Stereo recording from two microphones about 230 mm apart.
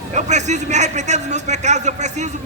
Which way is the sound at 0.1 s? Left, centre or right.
Right.